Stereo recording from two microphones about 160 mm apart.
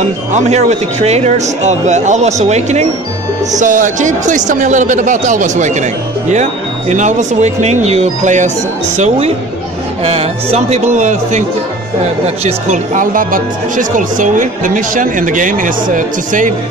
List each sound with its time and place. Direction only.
0.3 s a man's voice: 45° right (ahead or behind)
12.4 s speech: 45° right (ahead or behind)